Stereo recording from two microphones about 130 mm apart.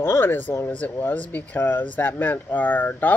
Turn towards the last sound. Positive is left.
turn(degrees=15)  # may be behind; listen again after turning